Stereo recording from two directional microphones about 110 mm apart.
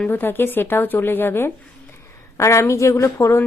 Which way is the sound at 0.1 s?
20° left (ahead or behind).